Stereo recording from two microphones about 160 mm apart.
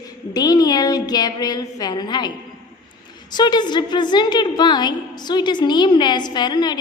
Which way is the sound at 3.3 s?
25° left (ahead or behind).